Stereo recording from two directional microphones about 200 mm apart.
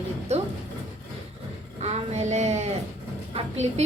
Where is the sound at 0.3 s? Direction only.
35° right (ahead or behind).